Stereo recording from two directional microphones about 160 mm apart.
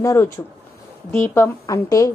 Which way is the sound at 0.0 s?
15° left (ahead or behind).